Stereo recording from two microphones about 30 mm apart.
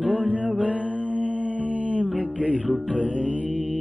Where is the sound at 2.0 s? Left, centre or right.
Left.